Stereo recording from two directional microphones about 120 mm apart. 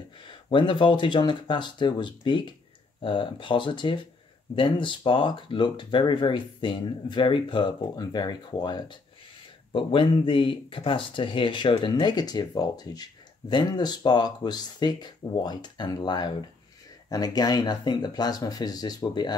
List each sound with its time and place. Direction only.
0.2 s speech: 45° left (ahead or behind)
9.7 s speech: 45° left (ahead or behind)